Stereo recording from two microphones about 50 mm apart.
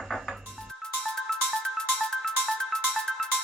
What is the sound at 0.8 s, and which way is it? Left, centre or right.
Music, centre.